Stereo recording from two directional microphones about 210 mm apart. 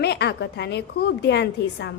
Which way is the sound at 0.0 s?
50° left (ahead or behind).